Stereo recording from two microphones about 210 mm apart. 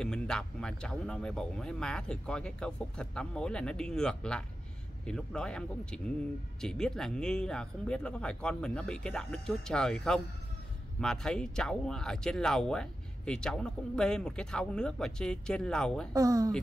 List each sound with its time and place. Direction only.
0.0 s speech: 5° left (ahead or behind)
16.1 s speech: 15° right (ahead or behind)